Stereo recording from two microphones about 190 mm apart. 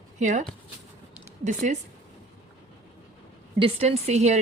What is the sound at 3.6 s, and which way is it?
Speech, 30° right (ahead or behind).